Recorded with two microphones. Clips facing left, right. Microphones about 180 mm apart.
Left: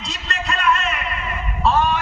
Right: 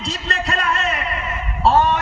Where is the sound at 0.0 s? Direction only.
30° right (ahead or behind).